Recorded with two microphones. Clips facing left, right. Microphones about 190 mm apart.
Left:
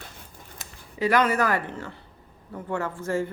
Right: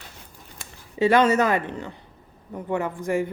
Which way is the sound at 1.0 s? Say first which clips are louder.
Right 4 dB; 25° right (ahead or behind).